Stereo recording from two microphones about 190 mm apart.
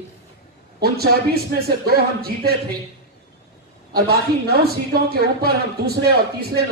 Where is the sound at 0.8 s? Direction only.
55° right (ahead or behind).